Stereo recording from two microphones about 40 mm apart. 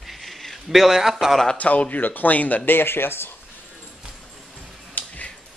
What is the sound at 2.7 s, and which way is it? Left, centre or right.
Speech, left.